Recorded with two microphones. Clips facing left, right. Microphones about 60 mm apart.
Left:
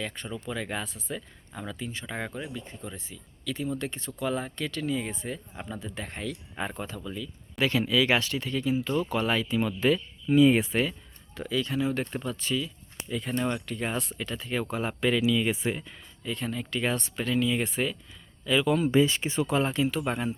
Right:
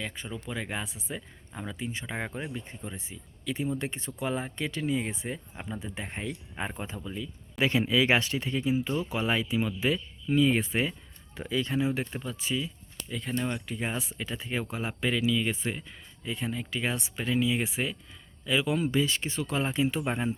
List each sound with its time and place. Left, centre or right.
0.0 s speech: centre
2.3 s speech: right
9.6 s speech: centre
10.2 s speech: centre
11.3 s speech: right
11.9 s speech: centre
14.3 s speech: centre
14.6 s speech: centre
16.2 s speech: centre
18.9 s speech: left
19.5 s speech: centre
19.7 s speech: centre